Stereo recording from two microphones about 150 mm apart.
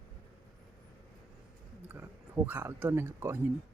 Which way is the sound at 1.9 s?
10° right (ahead or behind).